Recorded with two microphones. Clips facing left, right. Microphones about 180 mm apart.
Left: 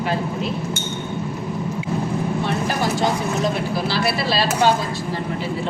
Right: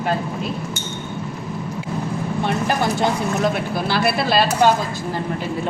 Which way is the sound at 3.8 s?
55° right (ahead or behind).